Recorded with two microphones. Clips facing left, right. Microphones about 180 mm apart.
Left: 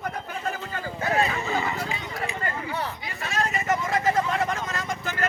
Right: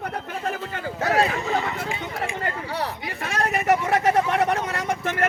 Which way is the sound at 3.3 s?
70° right (ahead or behind).